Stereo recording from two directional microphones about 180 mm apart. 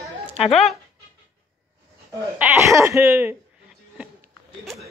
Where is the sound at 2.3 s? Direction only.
15° right (ahead or behind).